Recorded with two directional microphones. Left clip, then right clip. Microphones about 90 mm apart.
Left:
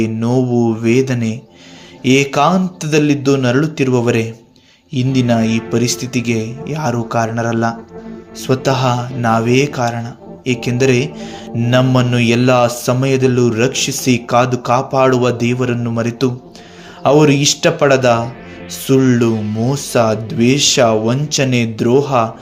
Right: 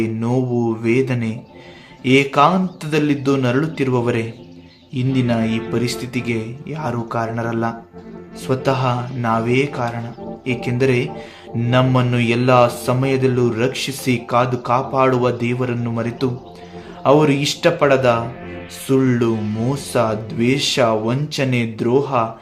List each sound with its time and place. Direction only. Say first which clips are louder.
0.0 s a man's voice: left 4 dB; 35° left (ahead or behind)
19.3 s speech: left 3 dB; centre (ahead or behind)
19.7 s a man's voice: left 5 dB; 35° left (ahead or behind)